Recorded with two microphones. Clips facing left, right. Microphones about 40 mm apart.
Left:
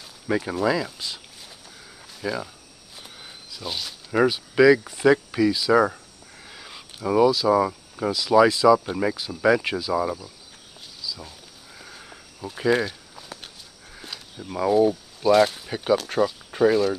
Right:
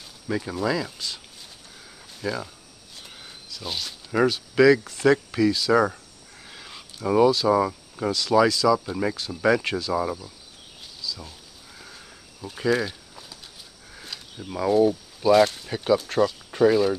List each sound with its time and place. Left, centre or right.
0.3 s speech: left
3.2 s a sound: centre
3.6 s speech: centre
6.4 s a sound: centre
8.5 s speech: left
8.9 s speech: centre
11.0 s sniff: centre
13.9 s a sound: centre
14.5 s speech: centre